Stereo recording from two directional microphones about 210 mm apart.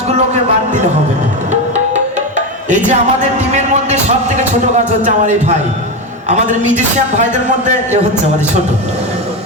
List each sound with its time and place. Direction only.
2.6 s a man's voice: 35° right (ahead or behind)